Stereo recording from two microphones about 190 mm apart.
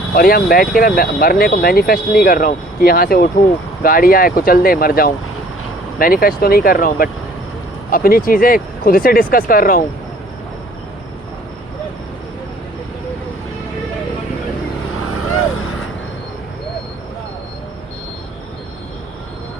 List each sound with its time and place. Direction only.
0.1 s speech: 50° left (ahead or behind)